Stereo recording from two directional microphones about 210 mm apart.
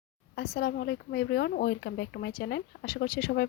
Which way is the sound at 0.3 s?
50° left (ahead or behind).